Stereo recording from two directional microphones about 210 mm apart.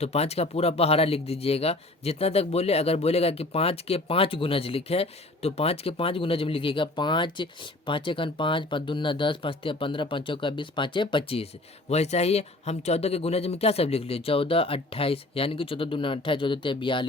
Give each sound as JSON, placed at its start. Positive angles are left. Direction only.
{"t": 0.0, "sound": "speech", "side_deg": 30}